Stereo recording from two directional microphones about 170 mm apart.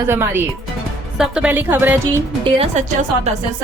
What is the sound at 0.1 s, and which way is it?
A woman's voice, 15° right (ahead or behind).